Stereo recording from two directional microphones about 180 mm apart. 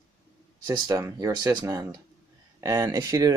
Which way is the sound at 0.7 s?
15° right (ahead or behind).